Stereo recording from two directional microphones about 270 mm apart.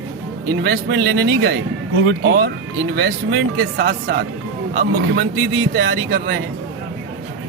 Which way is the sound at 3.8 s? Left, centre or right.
Right.